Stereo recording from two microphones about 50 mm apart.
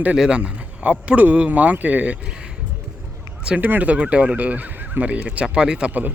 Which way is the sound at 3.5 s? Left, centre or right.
Right.